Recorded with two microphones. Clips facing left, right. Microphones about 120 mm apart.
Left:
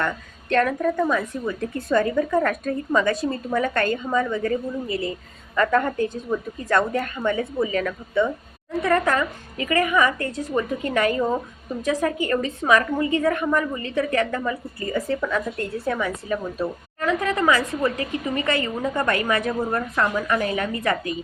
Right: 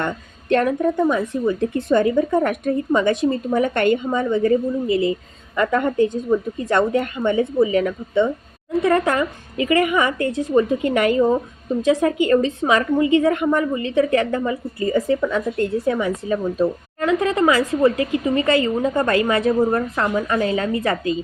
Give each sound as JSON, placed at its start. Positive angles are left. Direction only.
{"t": 0.5, "sound": "a woman's voice", "side_deg": -25}